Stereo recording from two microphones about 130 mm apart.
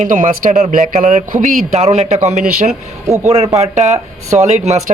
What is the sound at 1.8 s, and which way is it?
Speech, 55° right (ahead or behind).